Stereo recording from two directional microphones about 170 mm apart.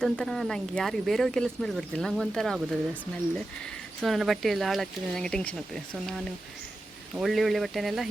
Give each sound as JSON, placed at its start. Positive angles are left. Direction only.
{"t": 0.0, "sound": "speech", "side_deg": 5}
{"t": 4.0, "sound": "speech", "side_deg": 0}
{"t": 7.2, "sound": "speech", "side_deg": 0}